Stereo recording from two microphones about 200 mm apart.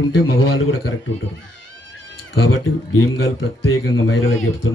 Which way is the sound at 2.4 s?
90° left.